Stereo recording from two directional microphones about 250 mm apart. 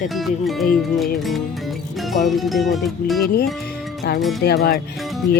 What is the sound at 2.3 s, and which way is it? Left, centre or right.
Speech, centre.